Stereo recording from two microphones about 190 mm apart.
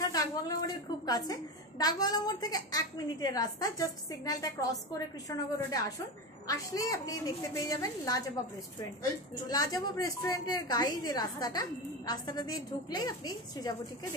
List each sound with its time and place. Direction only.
0.0 s a woman's voice: 20° left (ahead or behind)
9.5 s a woman's voice: 20° left (ahead or behind)